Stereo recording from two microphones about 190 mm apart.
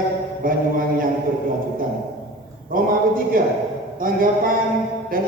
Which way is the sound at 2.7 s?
50° right (ahead or behind).